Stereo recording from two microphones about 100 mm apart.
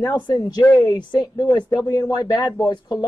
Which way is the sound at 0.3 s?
35° left (ahead or behind).